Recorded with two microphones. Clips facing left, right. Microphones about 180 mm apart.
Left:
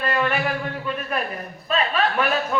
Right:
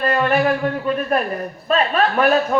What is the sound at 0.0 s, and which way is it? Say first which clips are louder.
A man's voice: right 6 dB; 40° right (ahead or behind).